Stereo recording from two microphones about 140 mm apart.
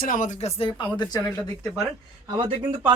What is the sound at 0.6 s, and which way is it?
Speech, 35° left (ahead or behind).